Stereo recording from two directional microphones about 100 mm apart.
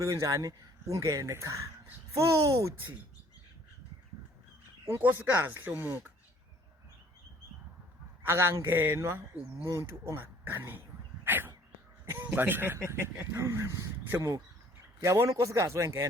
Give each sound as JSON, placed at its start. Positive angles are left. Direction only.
{"t": 0.0, "sound": "speech", "side_deg": -30}
{"t": 4.9, "sound": "a man's voice", "side_deg": -25}
{"t": 8.2, "sound": "a man's voice", "side_deg": -25}